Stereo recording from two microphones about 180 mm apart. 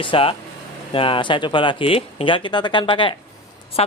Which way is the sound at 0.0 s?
30° left (ahead or behind).